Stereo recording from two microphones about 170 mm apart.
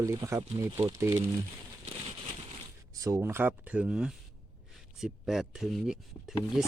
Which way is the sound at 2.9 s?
20° right (ahead or behind).